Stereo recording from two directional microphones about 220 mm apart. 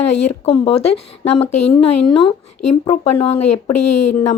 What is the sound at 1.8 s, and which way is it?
Speech, 20° left (ahead or behind).